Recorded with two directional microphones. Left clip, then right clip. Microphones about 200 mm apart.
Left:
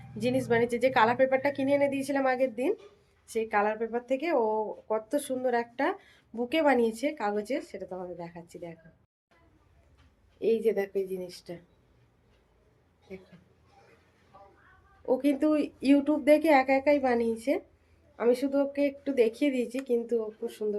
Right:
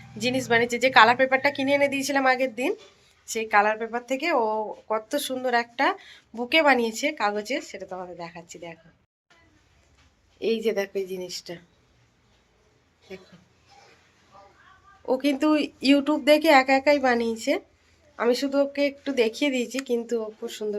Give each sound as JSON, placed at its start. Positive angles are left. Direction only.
{"t": 0.2, "sound": "speech", "side_deg": 10}
{"t": 7.9, "sound": "speech", "side_deg": 5}
{"t": 8.2, "sound": "speech", "side_deg": 15}
{"t": 10.4, "sound": "speech", "side_deg": -5}
{"t": 15.0, "sound": "speech", "side_deg": 0}